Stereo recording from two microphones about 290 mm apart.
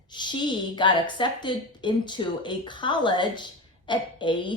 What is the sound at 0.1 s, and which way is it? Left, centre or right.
A woman's voice, centre.